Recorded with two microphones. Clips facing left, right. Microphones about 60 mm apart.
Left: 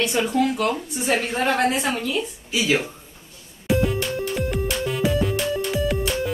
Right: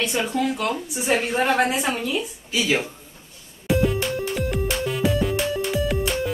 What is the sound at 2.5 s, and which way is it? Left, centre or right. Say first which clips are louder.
Speech: left 1 dB; centre.